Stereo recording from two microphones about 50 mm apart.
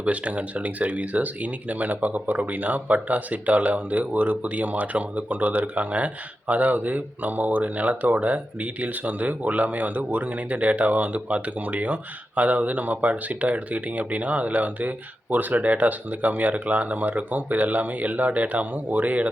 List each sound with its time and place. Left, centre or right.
0.0 s speech: right